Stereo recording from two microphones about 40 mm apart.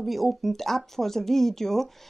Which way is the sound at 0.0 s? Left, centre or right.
Centre.